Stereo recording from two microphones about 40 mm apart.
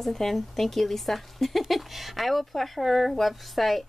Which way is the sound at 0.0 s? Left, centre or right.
Centre.